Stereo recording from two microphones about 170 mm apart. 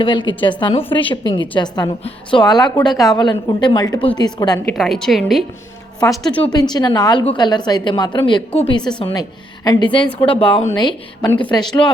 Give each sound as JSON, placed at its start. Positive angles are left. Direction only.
{"t": 0.0, "sound": "a woman's voice", "side_deg": 30}
{"t": 4.7, "sound": "a woman's voice", "side_deg": 0}
{"t": 6.5, "sound": "a woman's voice", "side_deg": 25}
{"t": 10.8, "sound": "a woman's voice", "side_deg": 25}